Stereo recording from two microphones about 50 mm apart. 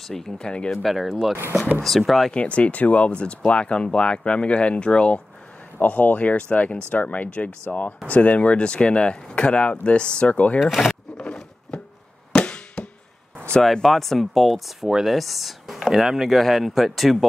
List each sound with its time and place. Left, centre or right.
0.0 s speech: centre
1.0 s speech: centre
1.8 s speech: centre
2.3 s speech: left
11.1 s a sound: centre
12.3 s chop: left
13.6 s speech: centre